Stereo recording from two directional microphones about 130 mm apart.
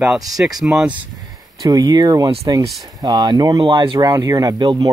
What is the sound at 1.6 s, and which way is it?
Speech, 30° right (ahead or behind).